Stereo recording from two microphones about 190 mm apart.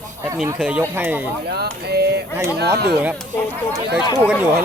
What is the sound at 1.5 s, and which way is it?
Speech, 55° right (ahead or behind).